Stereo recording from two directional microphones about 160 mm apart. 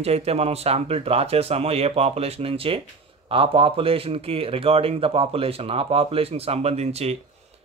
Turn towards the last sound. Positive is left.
turn(degrees=-40)  # may be behind; listen again after turning